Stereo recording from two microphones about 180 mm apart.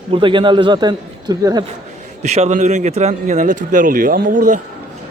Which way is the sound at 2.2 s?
40° right (ahead or behind).